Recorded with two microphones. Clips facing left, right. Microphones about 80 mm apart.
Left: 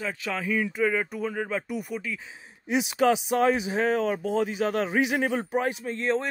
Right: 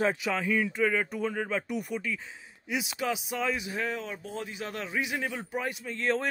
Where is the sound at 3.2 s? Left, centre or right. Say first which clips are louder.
Left 8 dB; left.